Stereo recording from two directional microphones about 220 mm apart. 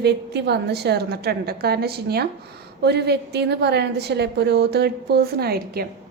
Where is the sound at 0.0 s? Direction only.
50° right (ahead or behind).